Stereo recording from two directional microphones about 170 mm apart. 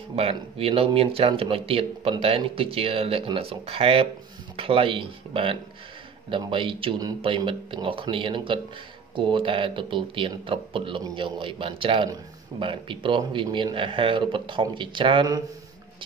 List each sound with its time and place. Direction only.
0.1 s speech: 35° right (ahead or behind)